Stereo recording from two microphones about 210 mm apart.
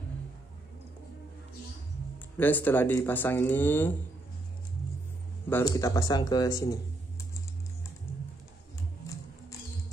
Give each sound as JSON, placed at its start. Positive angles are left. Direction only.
{"t": 2.1, "sound": "speech", "side_deg": 10}
{"t": 5.5, "sound": "speech", "side_deg": 15}